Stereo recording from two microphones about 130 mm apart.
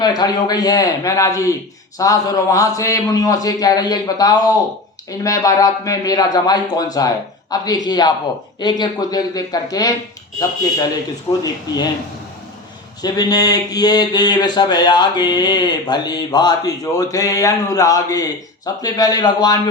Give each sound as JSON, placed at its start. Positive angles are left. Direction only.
{"t": 0.0, "sound": "a man's voice", "side_deg": 30}
{"t": 11.3, "sound": "speech", "side_deg": 45}
{"t": 13.0, "sound": "speech", "side_deg": 30}